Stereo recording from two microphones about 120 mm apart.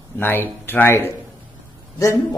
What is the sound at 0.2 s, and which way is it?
A man's voice, 15° left (ahead or behind).